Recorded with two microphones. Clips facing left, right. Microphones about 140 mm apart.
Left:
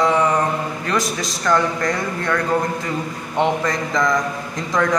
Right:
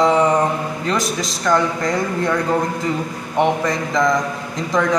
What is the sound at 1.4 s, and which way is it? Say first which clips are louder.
Speech: right 1 dB; 5° right (ahead or behind).